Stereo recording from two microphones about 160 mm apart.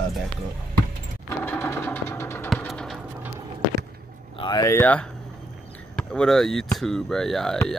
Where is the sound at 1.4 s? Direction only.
15° left (ahead or behind).